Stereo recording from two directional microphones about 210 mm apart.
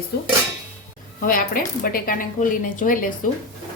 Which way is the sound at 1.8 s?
40° left (ahead or behind).